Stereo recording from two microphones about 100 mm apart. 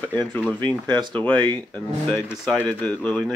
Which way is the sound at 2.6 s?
10° left (ahead or behind).